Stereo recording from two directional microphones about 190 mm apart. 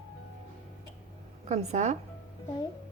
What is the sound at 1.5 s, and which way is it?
Speech, 35° right (ahead or behind).